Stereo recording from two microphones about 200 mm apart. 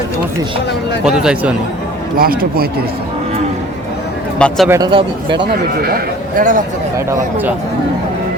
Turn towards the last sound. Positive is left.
turn(degrees=-45)  # may be behind; listen again after turning